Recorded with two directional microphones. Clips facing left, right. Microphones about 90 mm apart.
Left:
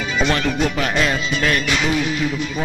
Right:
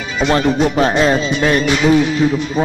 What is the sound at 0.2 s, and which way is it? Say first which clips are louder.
Speech: right 6 dB; 30° right (ahead or behind).